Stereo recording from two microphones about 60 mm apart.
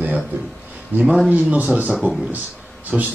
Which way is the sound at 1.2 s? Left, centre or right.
Right.